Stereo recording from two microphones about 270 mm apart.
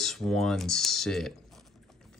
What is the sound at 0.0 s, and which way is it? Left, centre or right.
Speech, centre.